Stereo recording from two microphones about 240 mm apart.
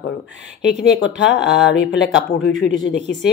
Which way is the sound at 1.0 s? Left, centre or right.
Left.